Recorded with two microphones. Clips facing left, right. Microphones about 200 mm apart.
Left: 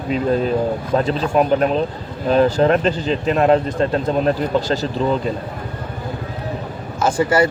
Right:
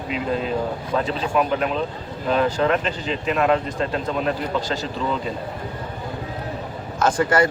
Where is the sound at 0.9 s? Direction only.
40° left (ahead or behind).